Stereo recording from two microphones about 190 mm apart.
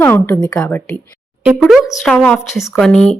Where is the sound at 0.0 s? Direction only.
10° left (ahead or behind).